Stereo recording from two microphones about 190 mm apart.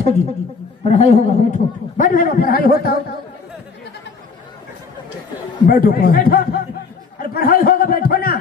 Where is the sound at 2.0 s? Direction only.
45° left (ahead or behind).